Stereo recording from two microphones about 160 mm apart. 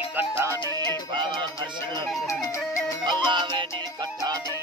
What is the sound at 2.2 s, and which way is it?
Music, 20° left (ahead or behind).